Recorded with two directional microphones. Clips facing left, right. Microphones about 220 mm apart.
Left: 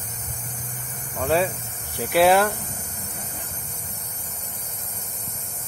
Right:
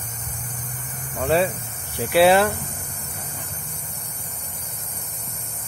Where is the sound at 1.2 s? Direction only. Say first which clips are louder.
Right 2 dB; 10° right (ahead or behind).